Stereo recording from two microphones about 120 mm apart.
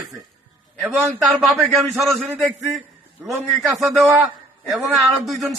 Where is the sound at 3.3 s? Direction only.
Centre (ahead or behind).